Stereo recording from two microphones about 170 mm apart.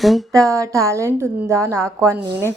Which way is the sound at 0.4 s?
20° right (ahead or behind).